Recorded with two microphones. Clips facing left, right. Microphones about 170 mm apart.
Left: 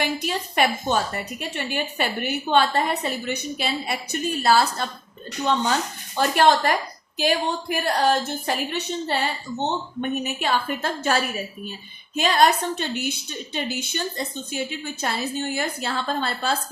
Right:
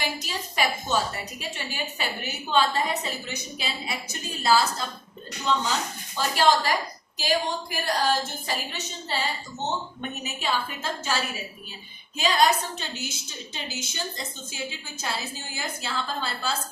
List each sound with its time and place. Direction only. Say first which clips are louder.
0.0 s a woman's voice: left 6 dB; 60° left (ahead or behind)
12.1 s a woman's voice: left 3 dB; 60° left (ahead or behind)